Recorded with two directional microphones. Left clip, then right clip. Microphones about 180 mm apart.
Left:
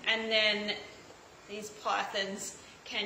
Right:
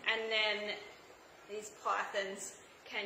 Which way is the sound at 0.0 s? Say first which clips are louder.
Left 5 dB; 15° right (ahead or behind).